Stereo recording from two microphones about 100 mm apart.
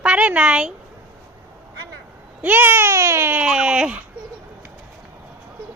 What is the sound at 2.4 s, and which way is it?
Speech, 20° right (ahead or behind).